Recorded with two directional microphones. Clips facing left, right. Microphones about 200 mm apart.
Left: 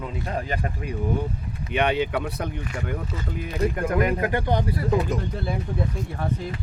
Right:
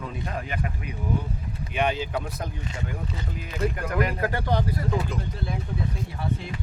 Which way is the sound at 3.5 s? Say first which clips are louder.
Left 3 dB; 40° left (ahead or behind).